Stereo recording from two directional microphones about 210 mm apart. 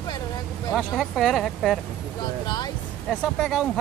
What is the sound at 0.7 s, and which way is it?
Speech, centre (ahead or behind).